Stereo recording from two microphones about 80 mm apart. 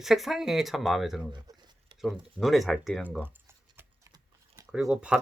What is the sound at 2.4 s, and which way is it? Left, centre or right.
Speech, centre.